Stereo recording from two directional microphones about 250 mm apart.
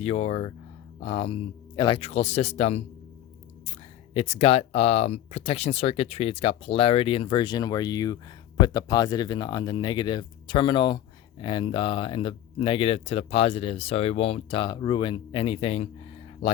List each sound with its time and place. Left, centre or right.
0.0 s speech: left
4.1 s speech: left